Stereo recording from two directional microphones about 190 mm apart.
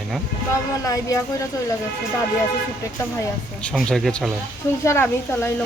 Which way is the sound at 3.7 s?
Centre (ahead or behind).